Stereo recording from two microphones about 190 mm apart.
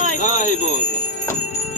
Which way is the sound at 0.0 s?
40° left (ahead or behind).